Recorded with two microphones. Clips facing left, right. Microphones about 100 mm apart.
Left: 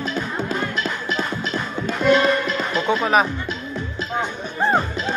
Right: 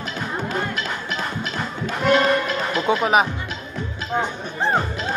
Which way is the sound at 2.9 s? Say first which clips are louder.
Even; 10° right (ahead or behind).